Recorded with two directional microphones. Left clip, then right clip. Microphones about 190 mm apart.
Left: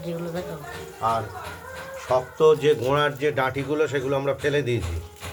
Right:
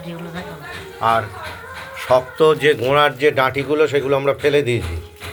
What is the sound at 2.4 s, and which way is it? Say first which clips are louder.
A man's voice: even; 5° right (ahead or behind).